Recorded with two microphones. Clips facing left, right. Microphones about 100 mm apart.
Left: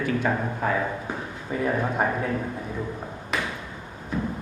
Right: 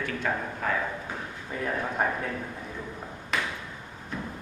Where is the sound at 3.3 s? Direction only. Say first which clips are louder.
Left 1 dB; 5° left (ahead or behind).